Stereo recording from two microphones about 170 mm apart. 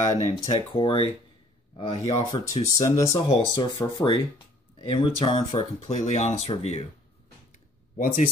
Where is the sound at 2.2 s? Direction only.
25° left (ahead or behind).